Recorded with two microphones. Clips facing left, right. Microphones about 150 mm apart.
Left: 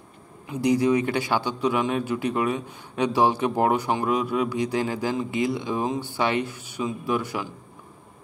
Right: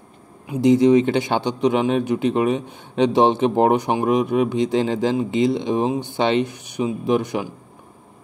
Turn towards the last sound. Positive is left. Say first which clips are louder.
# right 6 dB
turn(degrees=-20)  # may be behind; listen again after turning